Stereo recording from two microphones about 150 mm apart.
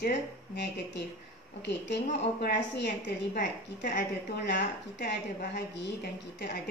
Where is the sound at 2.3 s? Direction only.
90° left; by 3.9 s 65° left (ahead or behind).